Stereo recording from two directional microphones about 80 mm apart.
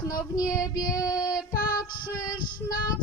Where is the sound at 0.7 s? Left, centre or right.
Left.